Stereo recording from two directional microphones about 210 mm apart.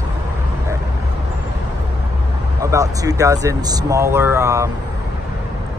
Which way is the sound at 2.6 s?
15° right (ahead or behind).